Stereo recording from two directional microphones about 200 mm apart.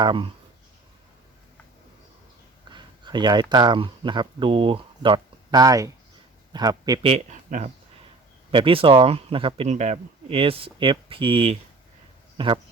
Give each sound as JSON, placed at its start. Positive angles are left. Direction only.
{"t": 0.0, "sound": "speech", "side_deg": -25}
{"t": 2.6, "sound": "a man's voice", "side_deg": -25}
{"t": 7.1, "sound": "speech", "side_deg": -35}